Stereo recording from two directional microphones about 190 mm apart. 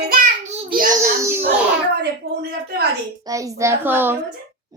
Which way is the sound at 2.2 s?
60° right (ahead or behind).